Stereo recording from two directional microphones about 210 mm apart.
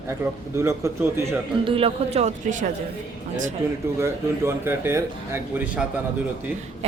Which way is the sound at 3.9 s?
10° right (ahead or behind).